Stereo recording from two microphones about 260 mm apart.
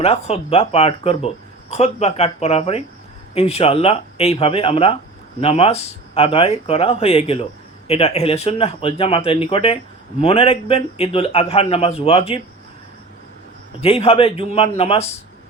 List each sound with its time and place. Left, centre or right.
0.0 s speech: left
13.8 s speech: left